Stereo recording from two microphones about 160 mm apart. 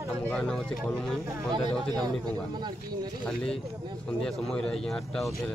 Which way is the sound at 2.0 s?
25° right (ahead or behind).